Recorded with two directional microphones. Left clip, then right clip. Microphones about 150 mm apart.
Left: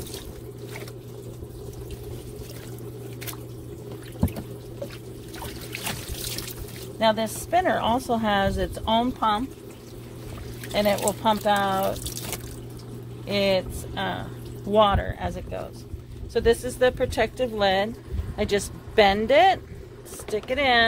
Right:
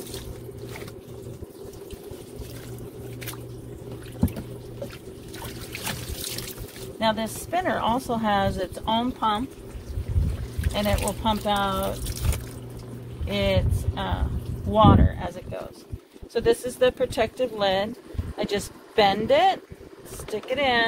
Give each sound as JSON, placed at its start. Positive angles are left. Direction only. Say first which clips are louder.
{"t": 7.0, "sound": "speech", "louder": "left 3 dB", "side_deg": 40}
{"t": 10.7, "sound": "speech", "louder": "left 4 dB", "side_deg": 45}
{"t": 13.3, "sound": "speech", "louder": "left 2 dB", "side_deg": 40}